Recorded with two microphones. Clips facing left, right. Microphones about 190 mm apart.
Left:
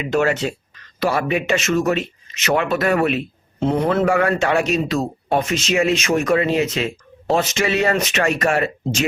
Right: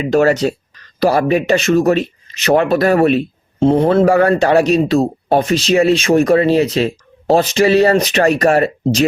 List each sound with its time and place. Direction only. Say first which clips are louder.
0.0 s speech: right 6 dB; 40° right (ahead or behind)